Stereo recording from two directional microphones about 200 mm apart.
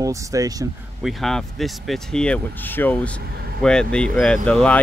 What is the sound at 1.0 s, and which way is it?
Speech, centre (ahead or behind).